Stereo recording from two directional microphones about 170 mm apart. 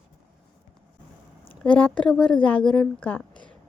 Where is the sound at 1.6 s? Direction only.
10° left (ahead or behind).